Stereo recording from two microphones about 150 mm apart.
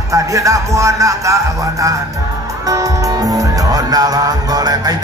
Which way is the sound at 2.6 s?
20° right (ahead or behind).